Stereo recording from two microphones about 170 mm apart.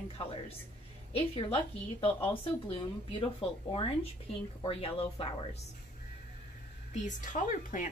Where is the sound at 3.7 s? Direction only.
30° left (ahead or behind).